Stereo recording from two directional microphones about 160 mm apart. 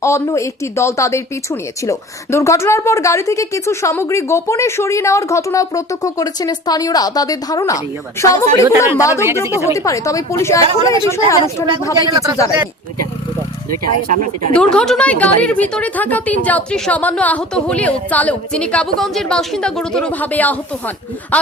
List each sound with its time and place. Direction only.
0.0 s a woman's voice: 20° left (ahead or behind)
9.2 s a woman's voice: 15° right (ahead or behind)
9.7 s a woman's voice: 20° left (ahead or behind)
12.0 s speech: 20° right (ahead or behind)
14.1 s speech: 55° right (ahead or behind)
14.5 s a woman's voice: 5° left (ahead or behind)